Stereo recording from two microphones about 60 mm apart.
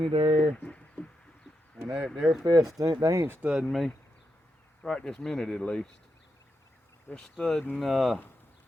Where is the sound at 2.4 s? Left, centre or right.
Right.